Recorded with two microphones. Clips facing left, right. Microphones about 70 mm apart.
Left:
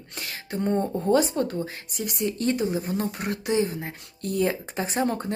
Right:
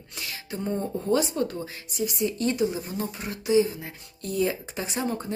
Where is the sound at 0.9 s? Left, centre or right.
Left.